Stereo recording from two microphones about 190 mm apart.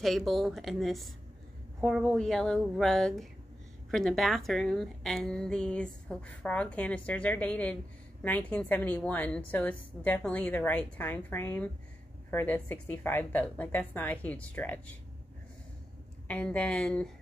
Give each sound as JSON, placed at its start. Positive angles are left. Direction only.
{"t": 0.0, "sound": "a woman's voice", "side_deg": 0}
{"t": 16.3, "sound": "a woman's voice", "side_deg": 5}